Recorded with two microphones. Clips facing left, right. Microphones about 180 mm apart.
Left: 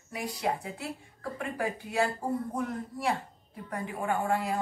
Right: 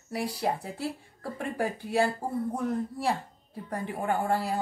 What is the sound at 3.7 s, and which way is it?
Speech, 35° right (ahead or behind).